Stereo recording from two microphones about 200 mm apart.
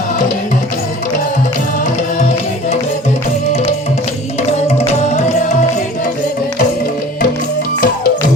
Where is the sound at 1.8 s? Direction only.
35° left (ahead or behind).